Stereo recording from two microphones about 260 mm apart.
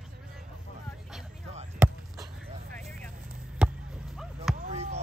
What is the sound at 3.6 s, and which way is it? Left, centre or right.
Basketball bounce, centre.